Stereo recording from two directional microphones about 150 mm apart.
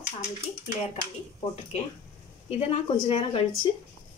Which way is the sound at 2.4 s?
40° left (ahead or behind).